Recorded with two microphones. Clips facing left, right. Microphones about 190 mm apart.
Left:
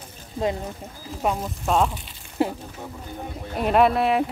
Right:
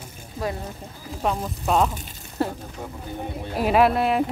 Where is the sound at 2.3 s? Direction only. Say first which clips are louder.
Left 2 dB; 15° left (ahead or behind).